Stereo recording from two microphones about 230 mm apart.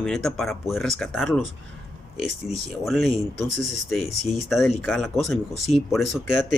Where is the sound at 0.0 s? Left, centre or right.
Centre.